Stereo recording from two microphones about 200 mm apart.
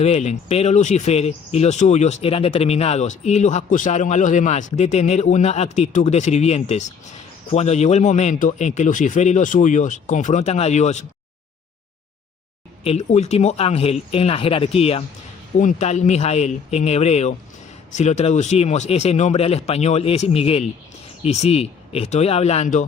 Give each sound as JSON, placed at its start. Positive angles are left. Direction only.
{"t": 0.0, "sound": "speech", "side_deg": 35}
{"t": 12.8, "sound": "speech", "side_deg": 30}